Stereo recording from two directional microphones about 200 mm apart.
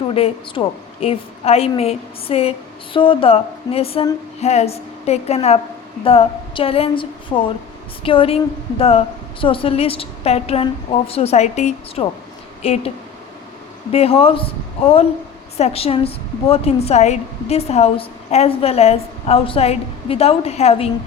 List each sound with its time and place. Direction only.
0.1 s a woman's voice: 30° left (ahead or behind)
13.9 s a woman's voice: 30° left (ahead or behind)